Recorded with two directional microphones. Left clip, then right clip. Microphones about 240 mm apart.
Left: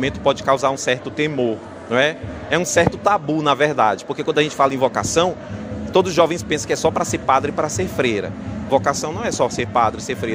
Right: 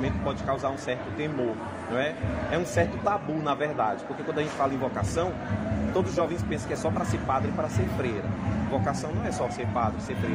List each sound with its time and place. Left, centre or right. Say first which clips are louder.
0.0 s a man's voice: left 12 dB; left